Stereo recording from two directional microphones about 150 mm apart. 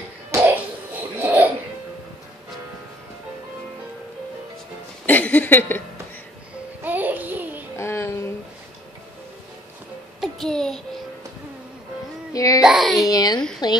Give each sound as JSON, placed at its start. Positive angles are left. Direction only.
{"t": 1.1, "sound": "music", "side_deg": -10}
{"t": 5.0, "sound": "a sound", "side_deg": 10}
{"t": 6.8, "sound": "music", "side_deg": -10}
{"t": 7.7, "sound": "a sound", "side_deg": 20}
{"t": 10.2, "sound": "child singing", "side_deg": 5}
{"t": 12.3, "sound": "baby cry", "side_deg": 25}
{"t": 12.6, "sound": "a child's voice", "side_deg": 0}
{"t": 13.0, "sound": "speech", "side_deg": 25}